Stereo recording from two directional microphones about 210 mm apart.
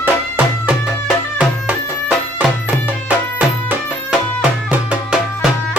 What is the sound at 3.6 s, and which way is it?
Music, 10° right (ahead or behind).